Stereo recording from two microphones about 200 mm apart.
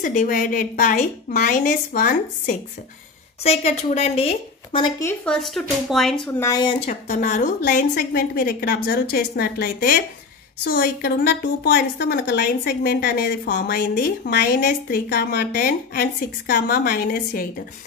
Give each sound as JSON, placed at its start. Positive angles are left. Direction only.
{"t": 0.0, "sound": "a woman's voice", "side_deg": 40}
{"t": 3.4, "sound": "a woman's voice", "side_deg": 35}
{"t": 5.0, "sound": "speech", "side_deg": 5}
{"t": 6.4, "sound": "speech", "side_deg": 20}
{"t": 6.9, "sound": "a woman's voice", "side_deg": 35}